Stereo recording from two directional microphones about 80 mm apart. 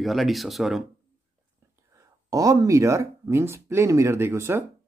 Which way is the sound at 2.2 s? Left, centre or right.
Right.